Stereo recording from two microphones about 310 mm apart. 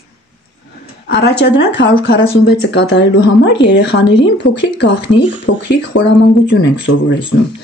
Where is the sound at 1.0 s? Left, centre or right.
Left.